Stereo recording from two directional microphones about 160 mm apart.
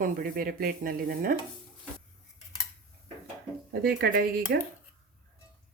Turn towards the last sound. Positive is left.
turn(degrees=-65)  # may be behind; listen again after turning